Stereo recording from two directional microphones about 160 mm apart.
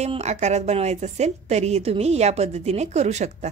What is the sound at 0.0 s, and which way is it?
A woman's voice, 45° right (ahead or behind).